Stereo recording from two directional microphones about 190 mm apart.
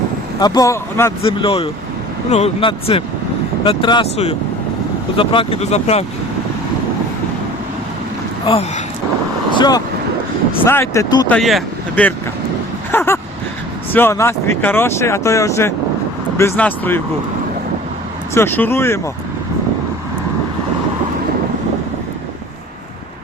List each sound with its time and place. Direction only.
0.3 s speech: 20° left (ahead or behind)
1.2 s speech: 30° left (ahead or behind)
9.6 s speech: 20° left (ahead or behind)
11.3 s speech: centre (ahead or behind)
12.9 s vehicle: 10° left (ahead or behind)
13.9 s speech: 15° left (ahead or behind)
18.3 s speech: 10° left (ahead or behind)